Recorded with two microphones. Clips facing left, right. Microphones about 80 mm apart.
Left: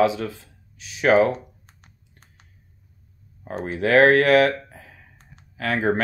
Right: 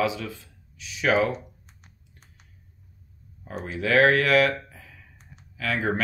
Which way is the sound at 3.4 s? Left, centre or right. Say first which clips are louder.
Left 5 dB; left.